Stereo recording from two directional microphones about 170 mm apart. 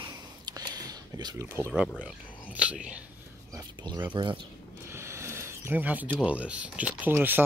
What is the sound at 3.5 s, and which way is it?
Speech, 25° right (ahead or behind).